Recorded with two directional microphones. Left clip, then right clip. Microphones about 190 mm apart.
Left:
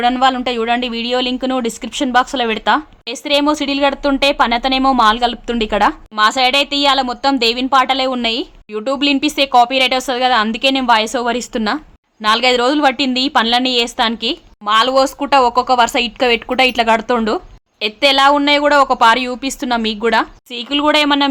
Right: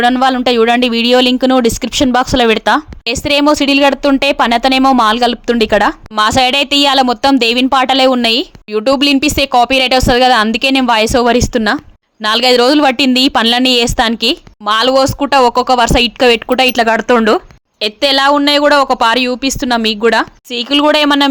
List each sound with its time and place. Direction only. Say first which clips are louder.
0.0 s speech: right 3 dB; 25° right (ahead or behind)